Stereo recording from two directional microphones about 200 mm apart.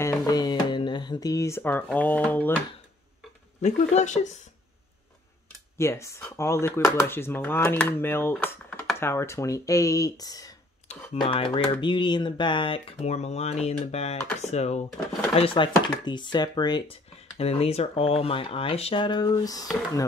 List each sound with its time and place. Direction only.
0.0 s speech: 20° left (ahead or behind)
3.6 s speech: 35° left (ahead or behind)
5.8 s speech: 15° left (ahead or behind)